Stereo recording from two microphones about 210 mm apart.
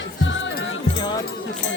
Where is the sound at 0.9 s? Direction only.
20° left (ahead or behind).